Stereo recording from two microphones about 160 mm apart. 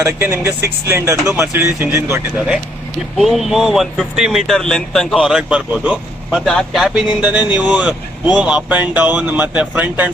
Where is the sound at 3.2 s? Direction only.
Centre (ahead or behind).